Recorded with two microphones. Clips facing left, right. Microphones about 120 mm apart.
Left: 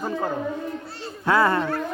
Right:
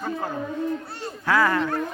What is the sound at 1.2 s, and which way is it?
Speech, 25° left (ahead or behind).